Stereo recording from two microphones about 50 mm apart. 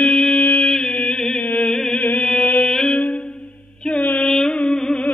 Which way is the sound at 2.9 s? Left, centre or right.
Left.